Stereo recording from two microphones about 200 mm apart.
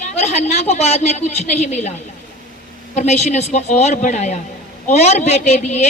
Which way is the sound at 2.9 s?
35° left (ahead or behind).